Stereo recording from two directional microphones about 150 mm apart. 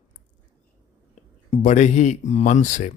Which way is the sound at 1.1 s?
50° left (ahead or behind).